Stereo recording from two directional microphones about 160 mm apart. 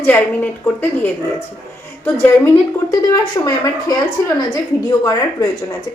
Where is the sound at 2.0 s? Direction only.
20° left (ahead or behind).